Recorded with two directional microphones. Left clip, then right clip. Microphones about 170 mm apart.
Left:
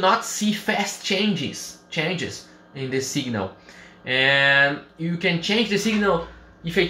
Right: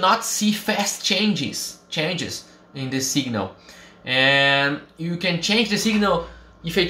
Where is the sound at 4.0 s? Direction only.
15° right (ahead or behind).